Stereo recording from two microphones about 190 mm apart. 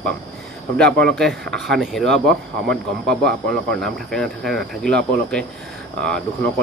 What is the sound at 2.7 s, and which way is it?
Speech, 60° right (ahead or behind).